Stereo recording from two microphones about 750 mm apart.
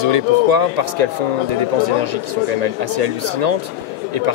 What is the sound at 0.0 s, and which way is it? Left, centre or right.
Speech, right.